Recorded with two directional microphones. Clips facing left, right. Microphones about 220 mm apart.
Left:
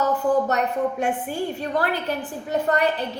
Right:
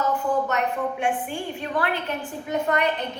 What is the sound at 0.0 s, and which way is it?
A woman's voice, 40° left (ahead or behind).